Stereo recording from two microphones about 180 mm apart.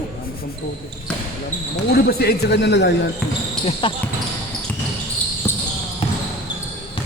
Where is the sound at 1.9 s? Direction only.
60° left (ahead or behind).